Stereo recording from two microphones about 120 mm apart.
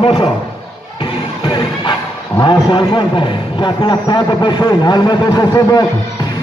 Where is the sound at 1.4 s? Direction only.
40° left (ahead or behind).